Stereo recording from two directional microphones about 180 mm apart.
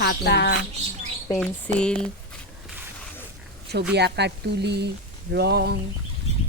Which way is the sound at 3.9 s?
70° right (ahead or behind).